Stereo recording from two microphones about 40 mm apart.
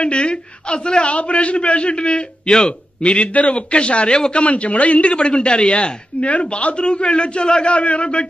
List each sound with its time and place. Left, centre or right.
0.0 s a man's voice: left